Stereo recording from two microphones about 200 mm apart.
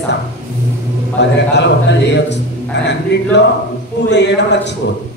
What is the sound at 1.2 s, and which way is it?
A man's voice, 60° left (ahead or behind).